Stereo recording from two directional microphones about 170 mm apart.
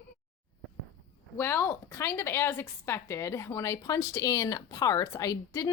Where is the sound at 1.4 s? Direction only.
15° left (ahead or behind).